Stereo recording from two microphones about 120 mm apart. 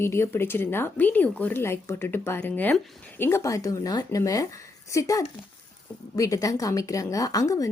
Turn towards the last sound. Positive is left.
turn(degrees=30)  # may be behind; listen again after turning